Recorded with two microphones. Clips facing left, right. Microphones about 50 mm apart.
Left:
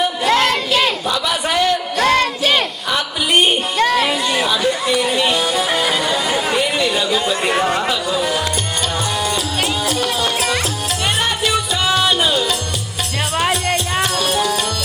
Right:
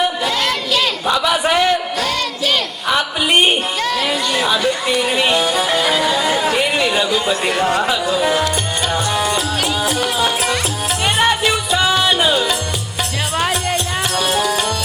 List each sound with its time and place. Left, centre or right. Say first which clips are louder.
0.3 s a sound: left 4 dB; left
1.0 s crowd: right 3 dB; centre
2.0 s music: left 5 dB; left
3.8 s music: left 4 dB; left
4.0 s chatter: left 1 dB; centre
4.6 s music: even; centre
6.7 s a sound: right 1 dB; centre
7.8 s music: right 2 dB; centre
13.3 s music: left 1 dB; centre